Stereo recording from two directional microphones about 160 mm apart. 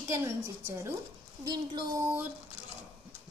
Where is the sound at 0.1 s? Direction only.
15° right (ahead or behind).